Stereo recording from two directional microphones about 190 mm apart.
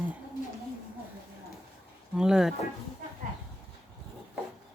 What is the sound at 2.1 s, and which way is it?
Speech, 5° right (ahead or behind).